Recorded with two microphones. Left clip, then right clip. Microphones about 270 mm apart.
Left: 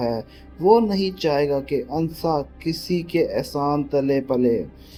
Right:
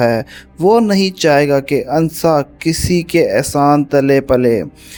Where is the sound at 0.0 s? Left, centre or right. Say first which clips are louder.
Right 11 dB; right.